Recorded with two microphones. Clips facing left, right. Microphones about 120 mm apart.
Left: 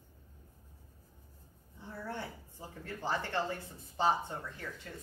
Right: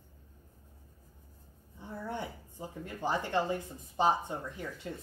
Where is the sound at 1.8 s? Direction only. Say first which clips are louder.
Right 3 dB; 15° right (ahead or behind).